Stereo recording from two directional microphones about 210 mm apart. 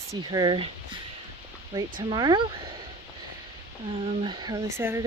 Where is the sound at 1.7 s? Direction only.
20° right (ahead or behind).